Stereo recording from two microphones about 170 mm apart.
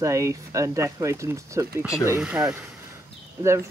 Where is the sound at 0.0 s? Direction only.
20° right (ahead or behind).